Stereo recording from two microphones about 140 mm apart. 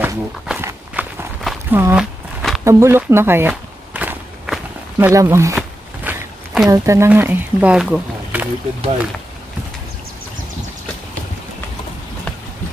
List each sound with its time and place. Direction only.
0.0 s walk: 15° right (ahead or behind)
1.7 s speech: 15° right (ahead or behind)
2.0 s a sound: centre (ahead or behind)
2.6 s speech: 20° right (ahead or behind)
3.1 s walk: 15° right (ahead or behind)
5.6 s a sound: 5° right (ahead or behind)
6.7 s speech: 20° right (ahead or behind)